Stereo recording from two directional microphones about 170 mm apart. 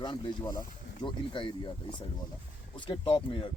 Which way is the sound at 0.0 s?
25° left (ahead or behind).